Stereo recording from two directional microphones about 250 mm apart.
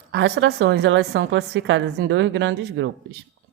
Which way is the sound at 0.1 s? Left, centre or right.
Right.